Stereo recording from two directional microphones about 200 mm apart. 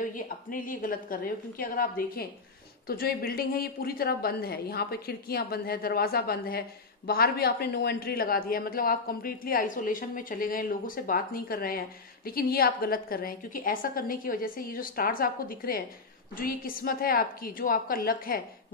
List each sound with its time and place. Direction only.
0.0 s speech: 40° left (ahead or behind)